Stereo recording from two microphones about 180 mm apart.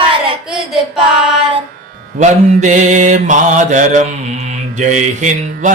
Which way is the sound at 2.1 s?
40° right (ahead or behind).